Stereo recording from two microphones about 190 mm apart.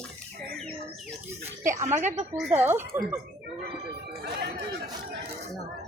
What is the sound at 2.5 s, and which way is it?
Speech, 10° right (ahead or behind).